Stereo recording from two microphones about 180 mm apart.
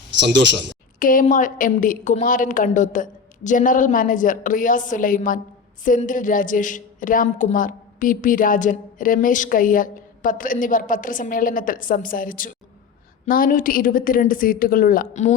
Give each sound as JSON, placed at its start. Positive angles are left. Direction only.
{"t": 0.2, "sound": "a man's voice", "side_deg": -80}
{"t": 0.9, "sound": "a woman's voice", "side_deg": 50}